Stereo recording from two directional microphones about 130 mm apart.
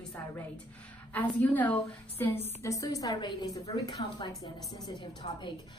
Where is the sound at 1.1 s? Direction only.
15° left (ahead or behind).